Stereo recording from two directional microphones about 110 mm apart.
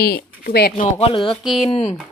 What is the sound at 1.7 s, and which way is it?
Speech, 65° left (ahead or behind).